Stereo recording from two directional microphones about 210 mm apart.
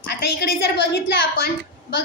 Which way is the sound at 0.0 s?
50° left (ahead or behind).